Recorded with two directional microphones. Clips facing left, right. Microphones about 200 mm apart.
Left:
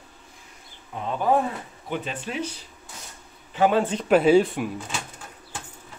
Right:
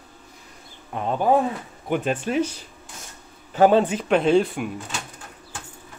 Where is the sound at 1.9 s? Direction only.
50° right (ahead or behind).